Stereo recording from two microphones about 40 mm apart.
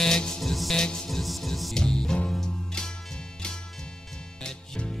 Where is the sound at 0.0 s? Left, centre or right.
Centre.